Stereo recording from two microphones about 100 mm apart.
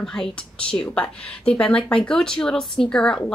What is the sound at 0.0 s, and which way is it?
Speech, 5° left (ahead or behind).